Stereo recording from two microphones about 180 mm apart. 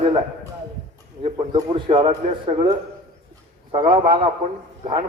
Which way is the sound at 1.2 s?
30° right (ahead or behind).